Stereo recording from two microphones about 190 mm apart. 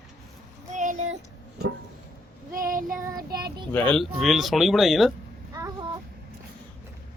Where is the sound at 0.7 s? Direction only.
40° right (ahead or behind).